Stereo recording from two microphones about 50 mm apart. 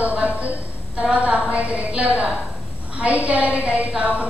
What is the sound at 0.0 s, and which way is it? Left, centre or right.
A woman's voice, right.